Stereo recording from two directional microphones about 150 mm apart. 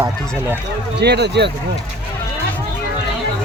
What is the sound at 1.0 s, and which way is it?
Speech, 90° right.